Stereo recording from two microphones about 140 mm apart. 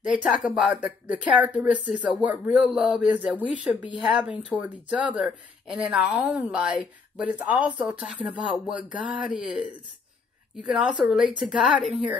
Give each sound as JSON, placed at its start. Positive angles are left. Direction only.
{"t": 0.0, "sound": "a woman's voice", "side_deg": -5}